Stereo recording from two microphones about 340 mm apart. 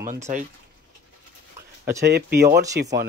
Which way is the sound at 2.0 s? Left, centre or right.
Right.